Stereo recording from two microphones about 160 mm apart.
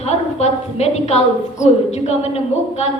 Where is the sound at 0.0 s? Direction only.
40° left (ahead or behind).